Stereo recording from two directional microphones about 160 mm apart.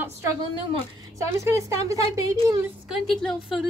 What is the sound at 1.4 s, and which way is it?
Speech, 20° right (ahead or behind).